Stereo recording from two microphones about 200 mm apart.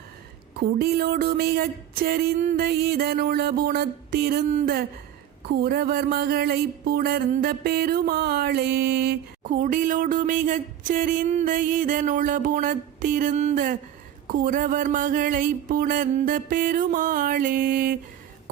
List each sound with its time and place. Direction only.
0.8 s mantra: 50° right (ahead or behind)